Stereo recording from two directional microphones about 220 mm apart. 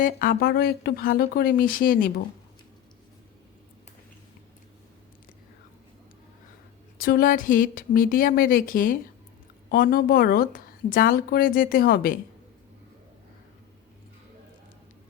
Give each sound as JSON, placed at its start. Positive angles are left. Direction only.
{"t": 0.0, "sound": "a woman's voice", "side_deg": 40}
{"t": 7.0, "sound": "a woman's voice", "side_deg": 40}